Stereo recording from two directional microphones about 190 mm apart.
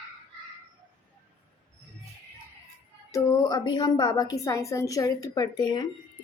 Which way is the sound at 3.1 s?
20° left (ahead or behind).